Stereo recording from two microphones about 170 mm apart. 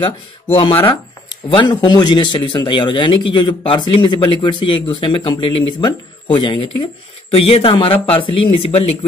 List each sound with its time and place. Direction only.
0.6 s a man's voice: 30° left (ahead or behind)